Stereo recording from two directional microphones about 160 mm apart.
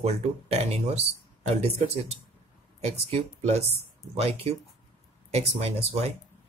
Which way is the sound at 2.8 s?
40° right (ahead or behind).